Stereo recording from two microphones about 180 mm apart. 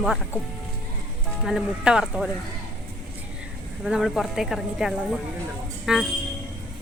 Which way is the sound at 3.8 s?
5° right (ahead or behind).